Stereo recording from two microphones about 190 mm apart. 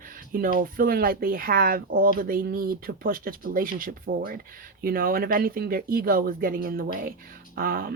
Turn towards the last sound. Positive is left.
turn(degrees=-50)  # may be behind; listen again after turning